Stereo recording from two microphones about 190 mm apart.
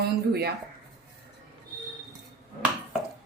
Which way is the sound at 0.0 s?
55° right (ahead or behind).